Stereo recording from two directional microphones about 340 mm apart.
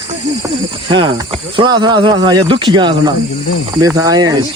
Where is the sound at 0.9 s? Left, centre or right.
Centre.